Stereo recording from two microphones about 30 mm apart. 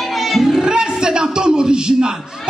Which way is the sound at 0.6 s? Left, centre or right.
Right.